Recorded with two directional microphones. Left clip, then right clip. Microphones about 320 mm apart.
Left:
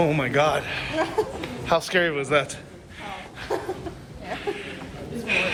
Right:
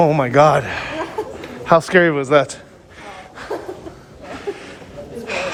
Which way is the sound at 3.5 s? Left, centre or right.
Centre.